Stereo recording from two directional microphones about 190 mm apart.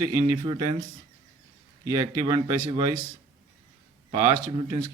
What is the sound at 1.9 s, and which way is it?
A man's voice, 20° right (ahead or behind).